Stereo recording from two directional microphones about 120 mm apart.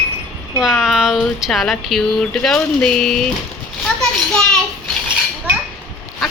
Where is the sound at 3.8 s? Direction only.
5° left (ahead or behind).